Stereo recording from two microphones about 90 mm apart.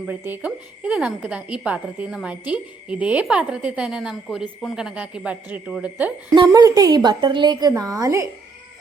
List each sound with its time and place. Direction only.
0.1 s speech: 20° right (ahead or behind)
6.5 s a woman's voice: 40° right (ahead or behind)
7.7 s a woman's voice: 40° right (ahead or behind)